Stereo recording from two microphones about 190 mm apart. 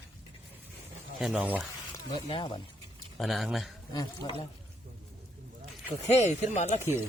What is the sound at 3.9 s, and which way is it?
Speech, 20° left (ahead or behind).